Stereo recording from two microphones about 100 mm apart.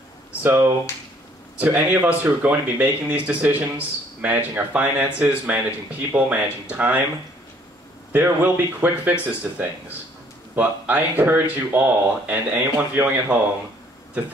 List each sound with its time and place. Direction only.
0.4 s speech: 20° right (ahead or behind)
8.1 s speech: 15° right (ahead or behind)
10.5 s speech: 20° right (ahead or behind)